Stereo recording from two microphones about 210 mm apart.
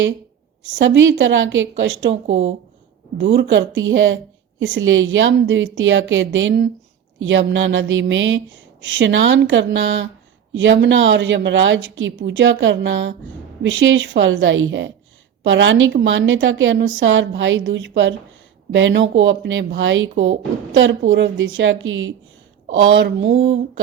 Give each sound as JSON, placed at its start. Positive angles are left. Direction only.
{"t": 0.6, "sound": "a woman's voice", "side_deg": -65}